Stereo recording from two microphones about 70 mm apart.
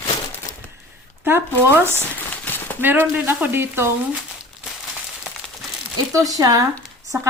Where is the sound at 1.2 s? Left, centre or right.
Right.